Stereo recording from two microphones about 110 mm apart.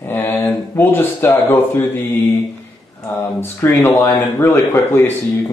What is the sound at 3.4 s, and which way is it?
Speech, 20° left (ahead or behind).